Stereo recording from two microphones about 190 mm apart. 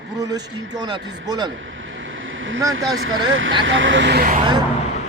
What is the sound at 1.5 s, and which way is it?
Vehicle, 80° right.